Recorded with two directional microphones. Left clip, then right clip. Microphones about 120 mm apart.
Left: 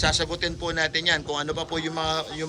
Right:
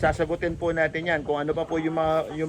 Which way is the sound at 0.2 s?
15° right (ahead or behind).